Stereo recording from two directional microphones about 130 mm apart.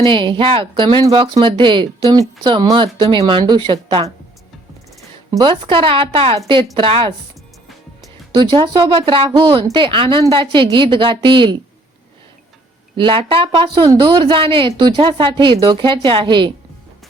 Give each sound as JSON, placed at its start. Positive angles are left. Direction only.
{"t": 0.0, "sound": "a woman's voice", "side_deg": -40}
{"t": 5.3, "sound": "a woman's voice", "side_deg": -35}
{"t": 8.3, "sound": "a woman's voice", "side_deg": -40}
{"t": 13.0, "sound": "a woman's voice", "side_deg": -40}